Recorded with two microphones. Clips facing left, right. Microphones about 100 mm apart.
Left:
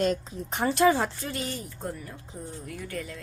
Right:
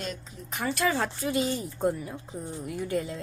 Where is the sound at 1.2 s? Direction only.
15° right (ahead or behind).